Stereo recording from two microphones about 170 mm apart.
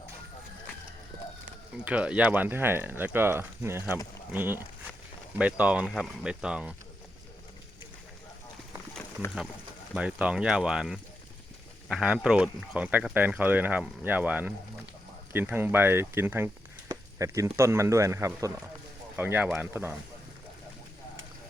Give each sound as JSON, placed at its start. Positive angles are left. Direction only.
{"t": 1.7, "sound": "speech", "side_deg": -5}
{"t": 9.9, "sound": "speech", "side_deg": -5}